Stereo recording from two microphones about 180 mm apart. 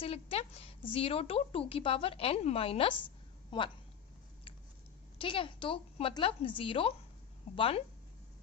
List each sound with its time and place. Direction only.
0.0 s a woman's voice: 35° left (ahead or behind)
5.1 s a woman's voice: 30° left (ahead or behind)